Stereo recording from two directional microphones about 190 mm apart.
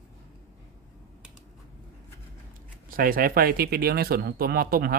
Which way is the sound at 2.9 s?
50° right (ahead or behind).